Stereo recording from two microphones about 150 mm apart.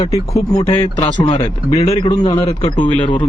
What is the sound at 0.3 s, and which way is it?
A man's voice, 20° left (ahead or behind).